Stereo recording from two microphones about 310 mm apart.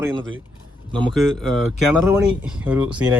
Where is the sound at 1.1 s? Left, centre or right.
Centre.